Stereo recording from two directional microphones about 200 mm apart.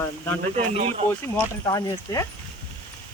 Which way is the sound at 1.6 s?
20° left (ahead or behind).